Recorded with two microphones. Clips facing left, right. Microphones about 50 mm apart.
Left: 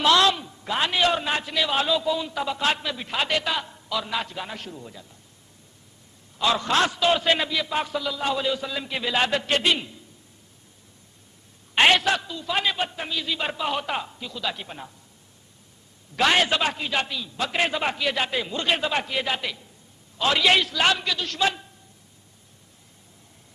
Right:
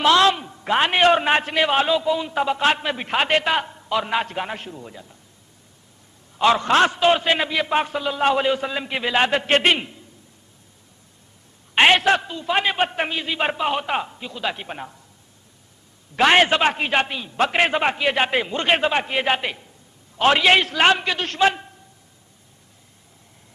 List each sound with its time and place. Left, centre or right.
0.0 s a man's voice: right
0.7 s a man's voice: right
1.8 s a man's voice: right
4.6 s a man's voice: right
6.3 s a man's voice: right
7.5 s a man's voice: right
9.6 s a man's voice: right
11.7 s a man's voice: right
16.2 s a man's voice: right